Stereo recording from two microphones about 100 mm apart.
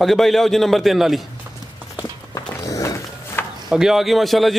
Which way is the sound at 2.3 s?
35° left (ahead or behind).